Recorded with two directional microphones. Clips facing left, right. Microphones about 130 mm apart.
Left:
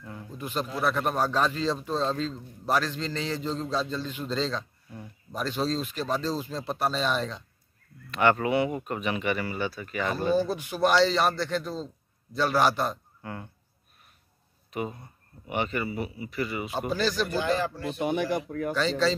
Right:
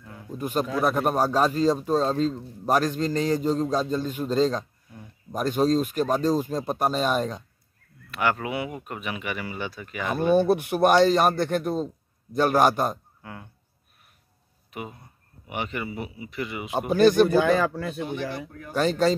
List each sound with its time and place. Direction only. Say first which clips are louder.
0.4 s speech: right 5 dB; 45° right (ahead or behind)
8.1 s speech: left 3 dB; 5° right (ahead or behind)
10.1 s a man's voice: right 7 dB; 60° right (ahead or behind)
13.2 s insect: left 3 dB; 5° right (ahead or behind)
14.7 s speech: left 4 dB; 10° right (ahead or behind)
16.9 s a man's voice: right 11 dB; 55° right (ahead or behind)
18.0 s speech: left 4 dB; 65° left (ahead or behind)
18.8 s speech: right 5 dB; 50° right (ahead or behind)